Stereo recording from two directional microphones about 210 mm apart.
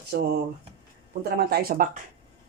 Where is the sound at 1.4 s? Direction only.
45° right (ahead or behind).